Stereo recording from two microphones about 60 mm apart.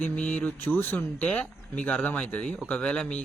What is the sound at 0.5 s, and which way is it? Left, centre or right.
Speech, left.